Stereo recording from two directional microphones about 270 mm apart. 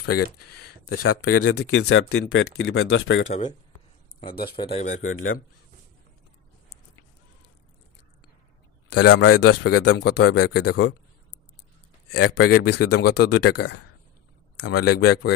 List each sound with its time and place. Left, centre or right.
0.2 s speech: left
0.9 s speech: left
1.5 s speech: left
2.0 s speech: left
3.3 s speech: left
4.6 s speech: left
5.0 s speech: left
8.9 s speech: left
9.8 s speech: left
12.1 s speech: left
13.0 s speech: left
13.3 s speech: left
14.8 s speech: left